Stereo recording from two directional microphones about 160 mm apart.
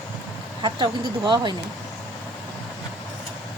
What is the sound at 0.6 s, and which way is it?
Speech, 30° right (ahead or behind).